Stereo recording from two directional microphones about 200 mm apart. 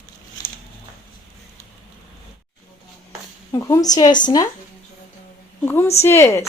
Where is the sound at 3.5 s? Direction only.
15° left (ahead or behind).